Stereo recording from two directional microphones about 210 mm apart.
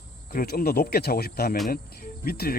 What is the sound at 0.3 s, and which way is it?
Speech, 45° left (ahead or behind).